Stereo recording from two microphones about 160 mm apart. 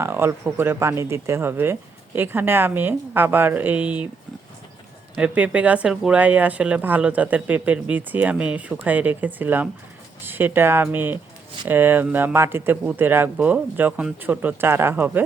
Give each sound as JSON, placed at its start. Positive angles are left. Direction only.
{"t": 0.0, "sound": "speech", "side_deg": -15}
{"t": 5.1, "sound": "speech", "side_deg": -10}